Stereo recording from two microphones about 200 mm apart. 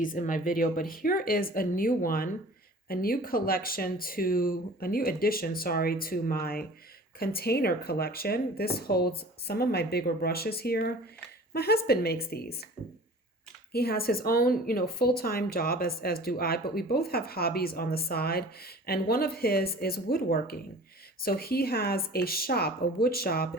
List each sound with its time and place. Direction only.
0.0 s a woman's voice: 40° left (ahead or behind)
13.7 s a woman's voice: 50° left (ahead or behind)